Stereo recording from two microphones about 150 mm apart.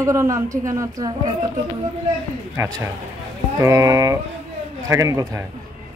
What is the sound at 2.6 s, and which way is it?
A woman's voice, 20° right (ahead or behind).